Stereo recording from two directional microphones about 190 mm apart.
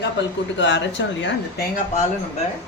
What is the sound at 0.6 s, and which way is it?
Speech, 70° left (ahead or behind).